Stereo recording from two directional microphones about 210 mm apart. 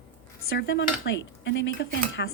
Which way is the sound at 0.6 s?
55° left (ahead or behind).